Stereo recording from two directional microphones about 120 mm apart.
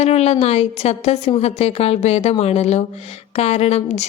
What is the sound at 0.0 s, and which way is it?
A woman's voice, 60° left (ahead or behind).